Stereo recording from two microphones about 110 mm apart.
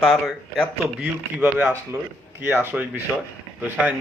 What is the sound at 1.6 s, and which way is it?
Speech, 20° right (ahead or behind).